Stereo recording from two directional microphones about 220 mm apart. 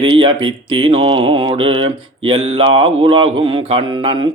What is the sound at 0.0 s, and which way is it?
Mantra, 25° right (ahead or behind).